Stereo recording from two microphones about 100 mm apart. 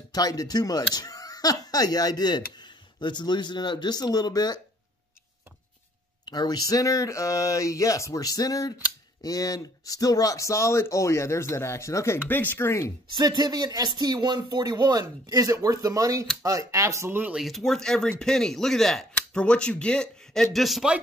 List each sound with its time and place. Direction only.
0.1 s speech: 40° left (ahead or behind)
6.3 s speech: 45° left (ahead or behind); by 12.9 s 25° left (ahead or behind)
13.1 s speech: 50° right (ahead or behind); by 17.2 s 30° right (ahead or behind)
17.4 s speech: centre (ahead or behind)